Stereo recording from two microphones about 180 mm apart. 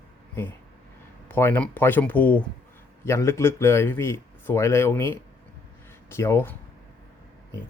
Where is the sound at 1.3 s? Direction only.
10° left (ahead or behind).